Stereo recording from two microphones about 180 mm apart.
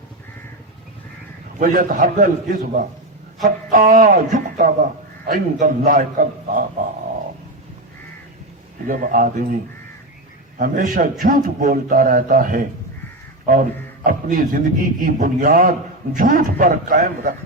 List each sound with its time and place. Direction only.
1.5 s a man's voice: 50° right (ahead or behind)
3.7 s a man's voice: 50° right (ahead or behind)
8.9 s a man's voice: 50° right (ahead or behind)
10.6 s a man's voice: 50° right (ahead or behind)